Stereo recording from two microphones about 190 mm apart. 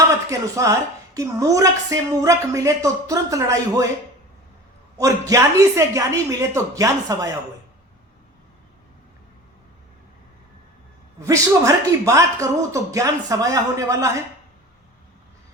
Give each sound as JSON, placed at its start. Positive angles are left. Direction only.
{"t": 0.3, "sound": "a woman's voice", "side_deg": -15}
{"t": 5.3, "sound": "a woman's voice", "side_deg": -15}
{"t": 11.2, "sound": "a woman's voice", "side_deg": -15}